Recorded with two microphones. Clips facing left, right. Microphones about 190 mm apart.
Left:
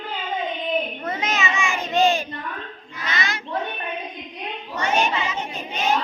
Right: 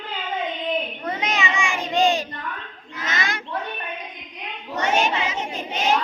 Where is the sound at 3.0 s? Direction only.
45° right (ahead or behind).